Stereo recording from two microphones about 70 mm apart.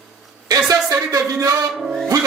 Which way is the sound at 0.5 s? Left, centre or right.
Right.